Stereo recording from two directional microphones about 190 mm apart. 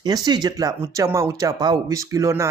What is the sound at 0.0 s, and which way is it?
Speech, 20° right (ahead or behind).